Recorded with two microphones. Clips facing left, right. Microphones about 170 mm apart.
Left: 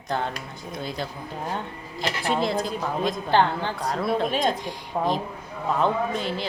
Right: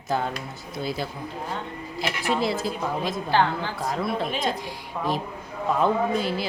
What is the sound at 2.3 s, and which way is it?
A woman's voice, 5° right (ahead or behind).